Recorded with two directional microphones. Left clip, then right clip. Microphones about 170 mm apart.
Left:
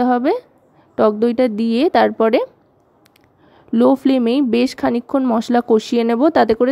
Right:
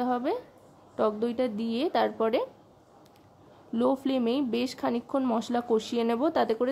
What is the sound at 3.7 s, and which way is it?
A woman's voice, 40° left (ahead or behind).